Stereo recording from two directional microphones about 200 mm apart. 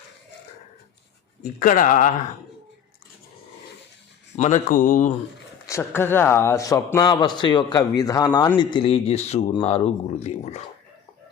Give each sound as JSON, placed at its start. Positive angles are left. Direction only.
{"t": 1.4, "sound": "speech", "side_deg": 45}
{"t": 4.4, "sound": "speech", "side_deg": 35}
{"t": 5.6, "sound": "speech", "side_deg": 15}